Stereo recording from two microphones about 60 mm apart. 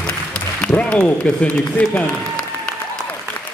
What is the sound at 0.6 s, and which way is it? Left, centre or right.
Speech, left.